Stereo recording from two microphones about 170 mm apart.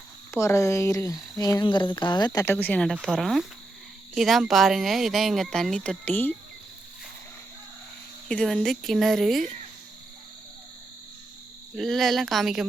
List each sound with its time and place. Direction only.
0.3 s speech: 15° left (ahead or behind)
8.3 s speech: 5° left (ahead or behind)
11.8 s speech: centre (ahead or behind)